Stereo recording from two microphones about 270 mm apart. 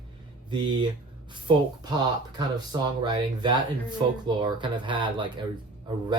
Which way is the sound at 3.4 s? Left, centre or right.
Centre.